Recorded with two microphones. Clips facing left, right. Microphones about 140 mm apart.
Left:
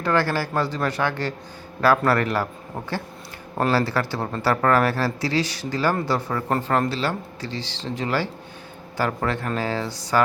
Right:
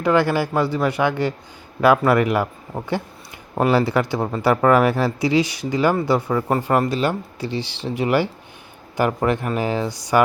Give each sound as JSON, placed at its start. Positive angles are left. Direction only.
{"t": 0.0, "sound": "speech", "side_deg": -15}